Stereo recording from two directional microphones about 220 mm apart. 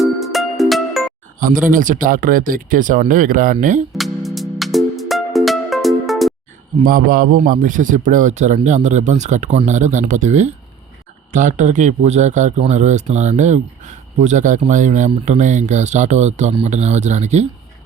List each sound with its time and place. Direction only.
0.0 s music: centre (ahead or behind)
1.4 s a man's voice: 40° right (ahead or behind)
3.9 s music: centre (ahead or behind)
6.8 s a man's voice: 40° right (ahead or behind)